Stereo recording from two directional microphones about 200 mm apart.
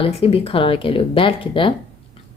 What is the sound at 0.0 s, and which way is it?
A woman's voice, 30° left (ahead or behind).